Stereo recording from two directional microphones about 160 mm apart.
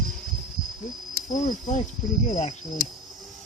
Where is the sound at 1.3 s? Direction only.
50° left (ahead or behind).